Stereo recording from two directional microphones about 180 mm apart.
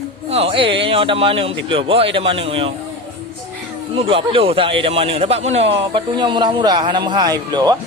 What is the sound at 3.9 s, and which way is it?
Speech, 30° right (ahead or behind).